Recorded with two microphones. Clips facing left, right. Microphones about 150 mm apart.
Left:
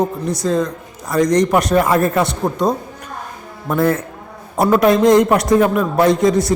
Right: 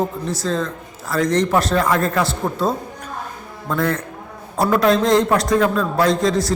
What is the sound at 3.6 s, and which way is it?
A man's voice, 25° left (ahead or behind).